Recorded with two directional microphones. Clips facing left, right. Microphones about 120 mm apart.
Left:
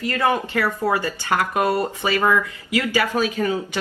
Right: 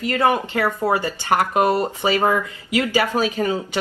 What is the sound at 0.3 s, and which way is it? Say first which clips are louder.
A woman's voice: even; 20° right (ahead or behind).